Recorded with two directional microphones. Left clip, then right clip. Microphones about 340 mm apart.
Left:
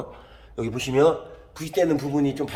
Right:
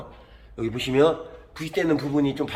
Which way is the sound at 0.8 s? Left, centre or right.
Centre.